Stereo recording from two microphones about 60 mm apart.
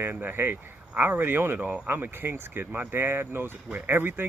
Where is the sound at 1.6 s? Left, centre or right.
Right.